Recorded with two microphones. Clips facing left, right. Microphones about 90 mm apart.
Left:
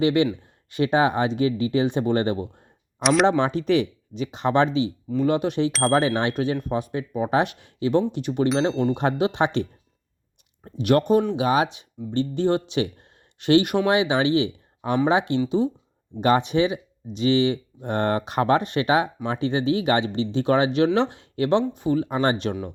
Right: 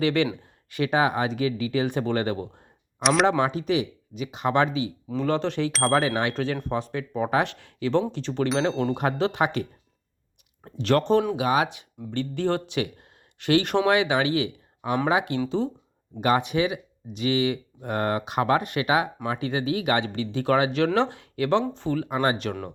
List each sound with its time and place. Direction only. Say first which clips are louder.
0.0 s speech: left 3 dB; 20° left (ahead or behind)
3.0 s speech: left 2 dB; centre (ahead or behind)
3.7 s speech: left 4 dB; 35° left (ahead or behind)
5.0 s speech: left 2 dB; 10° left (ahead or behind)
8.4 s speech: left 2 dB; centre (ahead or behind)
9.1 s speech: left 2 dB; 15° left (ahead or behind)
9.4 s speech: left 3 dB; 25° left (ahead or behind)
10.8 s speech: left 2 dB; 15° left (ahead or behind)
11.3 s speech: left 2 dB; 30° left (ahead or behind)
16.2 s speech: left 3 dB; 30° left (ahead or behind)